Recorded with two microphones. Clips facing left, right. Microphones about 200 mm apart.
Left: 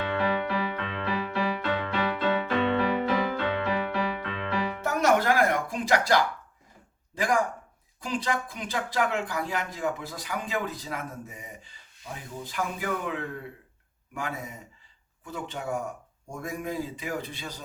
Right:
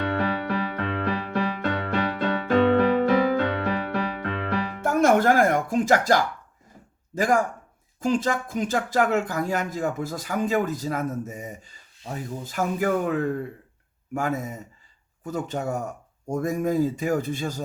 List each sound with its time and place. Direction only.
0.1 s music: 45° right (ahead or behind)
7.1 s speech: 45° right (ahead or behind)